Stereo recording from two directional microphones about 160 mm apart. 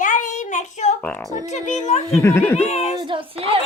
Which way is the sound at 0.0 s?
55° left (ahead or behind).